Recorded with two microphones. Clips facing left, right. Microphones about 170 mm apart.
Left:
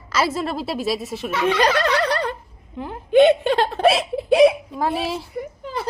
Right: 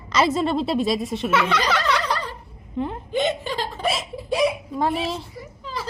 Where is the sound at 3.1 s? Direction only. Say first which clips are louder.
Left 13 dB; 65° left (ahead or behind).